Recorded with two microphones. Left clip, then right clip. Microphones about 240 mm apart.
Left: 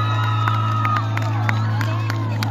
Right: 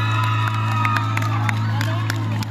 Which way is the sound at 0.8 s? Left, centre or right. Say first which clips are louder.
Right 1 dB; right.